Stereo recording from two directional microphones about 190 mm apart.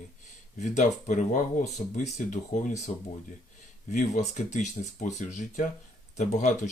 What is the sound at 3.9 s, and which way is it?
Speech, 40° left (ahead or behind).